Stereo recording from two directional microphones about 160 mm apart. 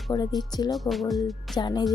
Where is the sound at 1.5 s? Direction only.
25° left (ahead or behind).